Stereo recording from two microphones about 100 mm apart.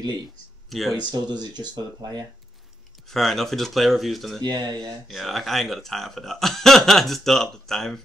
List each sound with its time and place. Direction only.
0.7 s speech: centre (ahead or behind)
1.1 s speech: 45° right (ahead or behind)
3.1 s speech: 5° left (ahead or behind)
4.4 s speech: 40° right (ahead or behind)
5.0 s speech: centre (ahead or behind)